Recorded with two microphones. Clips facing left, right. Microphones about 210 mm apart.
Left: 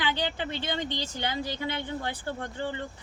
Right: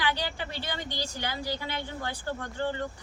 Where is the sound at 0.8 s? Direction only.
10° right (ahead or behind).